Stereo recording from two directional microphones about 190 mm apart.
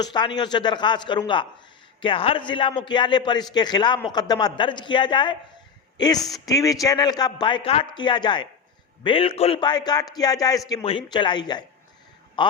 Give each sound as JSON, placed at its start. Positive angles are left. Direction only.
{"t": 0.0, "sound": "a man's voice", "side_deg": 25}
{"t": 6.2, "sound": "speech", "side_deg": 0}
{"t": 6.5, "sound": "a man's voice", "side_deg": 20}